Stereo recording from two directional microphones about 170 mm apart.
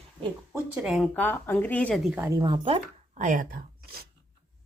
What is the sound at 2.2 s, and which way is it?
Speech, 25° right (ahead or behind).